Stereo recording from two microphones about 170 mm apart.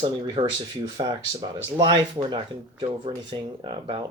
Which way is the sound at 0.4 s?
25° right (ahead or behind).